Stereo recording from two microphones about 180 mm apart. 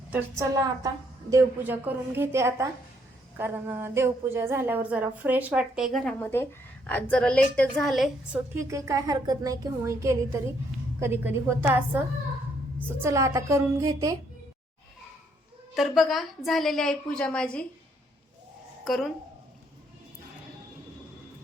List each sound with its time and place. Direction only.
0.1 s a woman's voice: 15° right (ahead or behind)
6.2 s a woman's voice: 10° left (ahead or behind)
8.5 s a woman's voice: 15° right (ahead or behind)
15.7 s a woman's voice: centre (ahead or behind)
18.9 s a woman's voice: centre (ahead or behind)